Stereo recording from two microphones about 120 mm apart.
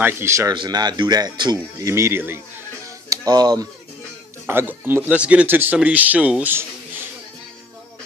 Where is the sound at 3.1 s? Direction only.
35° right (ahead or behind).